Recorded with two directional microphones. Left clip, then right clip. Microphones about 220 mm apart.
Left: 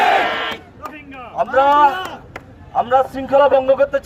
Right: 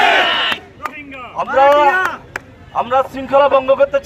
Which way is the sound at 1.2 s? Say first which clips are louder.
Right 2 dB; 45° left (ahead or behind).